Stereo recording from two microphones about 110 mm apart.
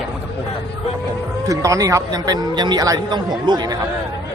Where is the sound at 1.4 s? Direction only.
30° right (ahead or behind).